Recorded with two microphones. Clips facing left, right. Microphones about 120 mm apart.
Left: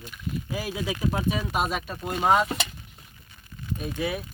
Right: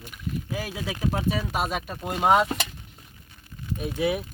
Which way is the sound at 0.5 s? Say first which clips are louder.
Left 2 dB; 10° left (ahead or behind).